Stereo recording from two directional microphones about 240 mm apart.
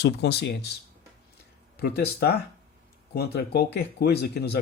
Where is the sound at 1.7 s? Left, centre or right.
Left.